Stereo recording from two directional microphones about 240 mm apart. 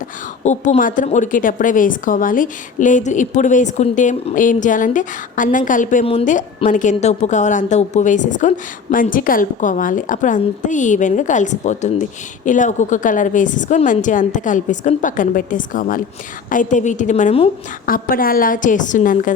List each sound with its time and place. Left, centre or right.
0.4 s speech: left